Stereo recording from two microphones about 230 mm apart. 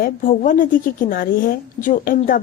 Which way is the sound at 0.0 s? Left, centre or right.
Left.